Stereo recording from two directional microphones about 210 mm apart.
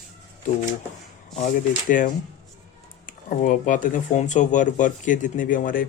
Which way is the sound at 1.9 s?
40° left (ahead or behind).